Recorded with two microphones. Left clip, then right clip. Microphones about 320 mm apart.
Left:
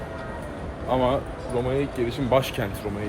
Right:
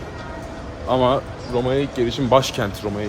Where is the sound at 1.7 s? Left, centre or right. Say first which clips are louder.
Right 6 dB; centre.